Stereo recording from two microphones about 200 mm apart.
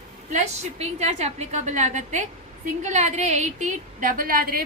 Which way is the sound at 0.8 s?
35° right (ahead or behind).